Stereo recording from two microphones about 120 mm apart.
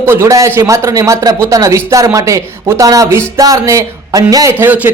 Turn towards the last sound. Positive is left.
turn(degrees=-15)  # may be behind; listen again after turning